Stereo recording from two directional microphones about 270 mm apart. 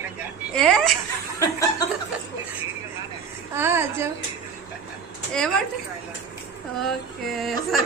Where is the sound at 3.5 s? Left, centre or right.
Centre.